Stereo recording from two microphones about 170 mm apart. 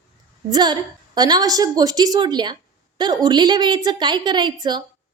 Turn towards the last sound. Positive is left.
turn(degrees=-25)  # may be behind; listen again after turning